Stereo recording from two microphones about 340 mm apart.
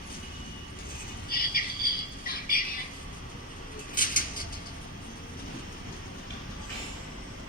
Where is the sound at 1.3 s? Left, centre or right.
Left.